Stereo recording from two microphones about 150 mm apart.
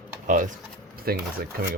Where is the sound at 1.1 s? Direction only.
90° right.